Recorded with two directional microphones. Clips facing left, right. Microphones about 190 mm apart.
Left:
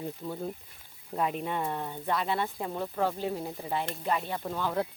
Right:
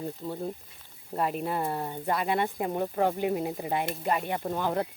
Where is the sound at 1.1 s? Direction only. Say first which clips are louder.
Right 2 dB; centre (ahead or behind).